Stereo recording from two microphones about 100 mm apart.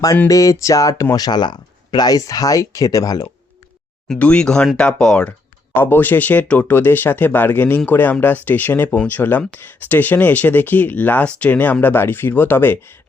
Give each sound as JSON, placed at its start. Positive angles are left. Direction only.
{"t": 0.3, "sound": "speech", "side_deg": 35}
{"t": 4.1, "sound": "speech", "side_deg": 10}
{"t": 5.7, "sound": "speech", "side_deg": 20}